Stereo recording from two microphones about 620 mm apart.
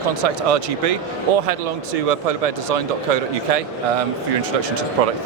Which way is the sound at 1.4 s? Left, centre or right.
Right.